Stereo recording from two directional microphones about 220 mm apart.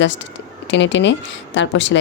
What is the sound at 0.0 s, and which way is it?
Speech, 55° left (ahead or behind).